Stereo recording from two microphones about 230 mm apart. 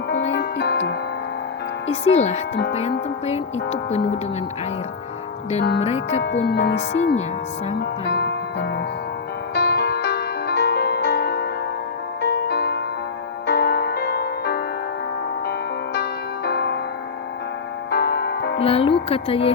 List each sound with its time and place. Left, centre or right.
0.3 s music: left
1.9 s speech: left
5.8 s speech: left
6.2 s speech: left
9.6 s music: left
16.0 s music: left
17.9 s music: left
18.6 s music: left
19.0 s speech: left